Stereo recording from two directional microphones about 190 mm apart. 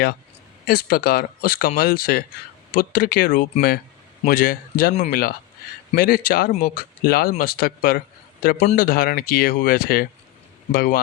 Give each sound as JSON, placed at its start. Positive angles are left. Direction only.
{"t": 0.7, "sound": "speech", "side_deg": 55}